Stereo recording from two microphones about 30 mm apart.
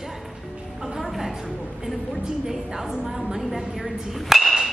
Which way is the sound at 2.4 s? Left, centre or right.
Centre.